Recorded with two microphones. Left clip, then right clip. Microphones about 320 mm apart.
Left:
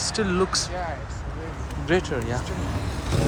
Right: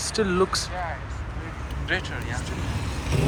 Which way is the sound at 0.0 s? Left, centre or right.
Centre.